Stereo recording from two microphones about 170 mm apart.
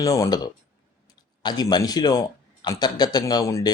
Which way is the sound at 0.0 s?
20° left (ahead or behind).